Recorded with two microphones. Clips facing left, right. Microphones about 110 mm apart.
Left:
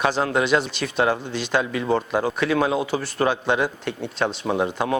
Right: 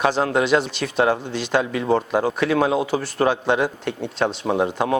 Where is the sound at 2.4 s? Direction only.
55° right (ahead or behind).